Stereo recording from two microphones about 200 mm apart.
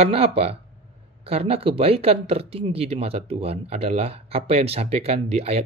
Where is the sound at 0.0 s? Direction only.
30° right (ahead or behind).